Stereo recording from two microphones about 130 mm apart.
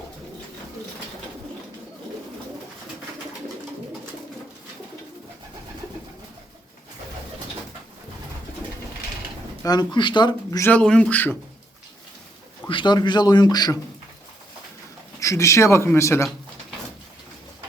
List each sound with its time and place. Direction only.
9.6 s a man's voice: 35° left (ahead or behind)
10.6 s speech: 10° left (ahead or behind)
12.6 s a man's voice: 35° left (ahead or behind)
15.2 s speech: 25° left (ahead or behind)